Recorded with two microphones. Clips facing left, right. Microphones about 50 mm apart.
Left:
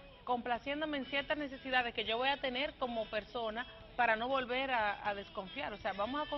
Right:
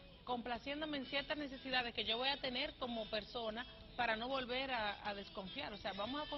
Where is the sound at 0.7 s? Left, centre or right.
Left.